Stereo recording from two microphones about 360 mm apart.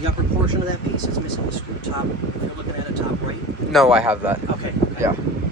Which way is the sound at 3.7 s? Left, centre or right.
Centre.